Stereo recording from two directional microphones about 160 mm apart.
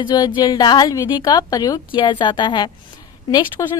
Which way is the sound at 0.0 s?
30° left (ahead or behind).